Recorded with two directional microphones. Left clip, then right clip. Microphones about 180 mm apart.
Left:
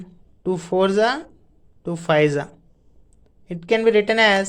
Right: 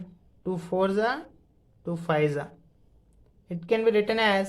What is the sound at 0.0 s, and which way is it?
Speech, 30° left (ahead or behind).